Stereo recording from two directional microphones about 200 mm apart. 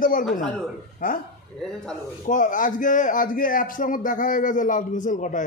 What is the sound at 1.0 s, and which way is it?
Speech, 45° left (ahead or behind).